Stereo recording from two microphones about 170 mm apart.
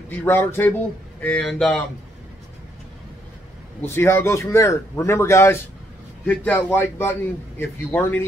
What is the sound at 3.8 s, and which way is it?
A man's voice, 15° left (ahead or behind).